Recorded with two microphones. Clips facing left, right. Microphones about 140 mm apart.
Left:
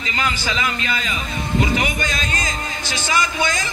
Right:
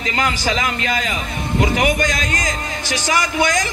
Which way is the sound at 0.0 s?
60° right (ahead or behind).